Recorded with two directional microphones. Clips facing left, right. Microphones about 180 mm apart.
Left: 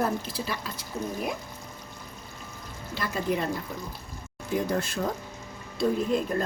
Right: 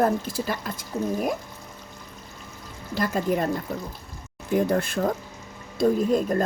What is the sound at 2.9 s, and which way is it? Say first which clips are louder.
Speech: right 5 dB; 45° right (ahead or behind).